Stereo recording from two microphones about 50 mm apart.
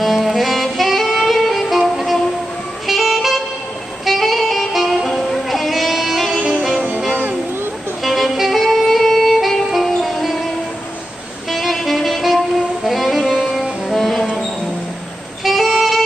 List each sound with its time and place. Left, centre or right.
0.0 s saxophone: centre
5.1 s music: centre
7.1 s music: right
8.0 s music: centre
11.5 s saxophone: centre
15.4 s saxophone: centre